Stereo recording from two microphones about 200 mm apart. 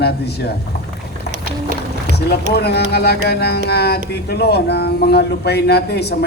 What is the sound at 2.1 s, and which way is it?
Speech, 55° left (ahead or behind).